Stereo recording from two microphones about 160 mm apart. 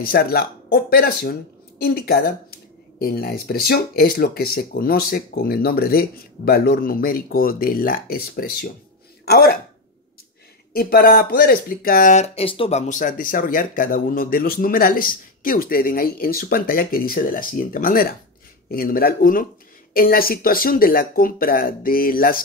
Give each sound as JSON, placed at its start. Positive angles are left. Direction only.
{"t": 0.0, "sound": "speech", "side_deg": 70}
{"t": 9.2, "sound": "speech", "side_deg": 80}
{"t": 10.7, "sound": "speech", "side_deg": 70}